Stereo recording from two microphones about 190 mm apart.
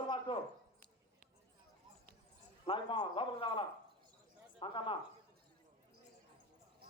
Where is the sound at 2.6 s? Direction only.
25° left (ahead or behind).